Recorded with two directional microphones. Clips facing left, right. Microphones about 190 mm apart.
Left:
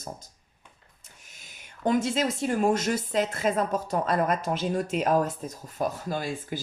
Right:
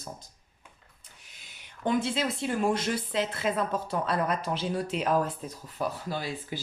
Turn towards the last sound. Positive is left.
turn(degrees=45)  # may be behind; listen again after turning